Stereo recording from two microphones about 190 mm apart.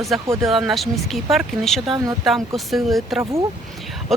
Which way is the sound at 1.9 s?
20° right (ahead or behind).